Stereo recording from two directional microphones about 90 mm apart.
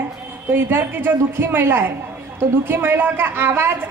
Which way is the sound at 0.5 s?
25° right (ahead or behind).